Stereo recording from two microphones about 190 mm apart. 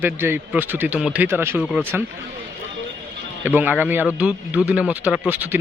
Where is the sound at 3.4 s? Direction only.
10° right (ahead or behind).